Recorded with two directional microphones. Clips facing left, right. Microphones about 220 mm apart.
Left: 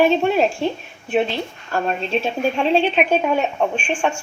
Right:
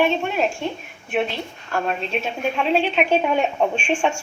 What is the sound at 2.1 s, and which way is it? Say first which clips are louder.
Speech: left 4 dB; 30° left (ahead or behind).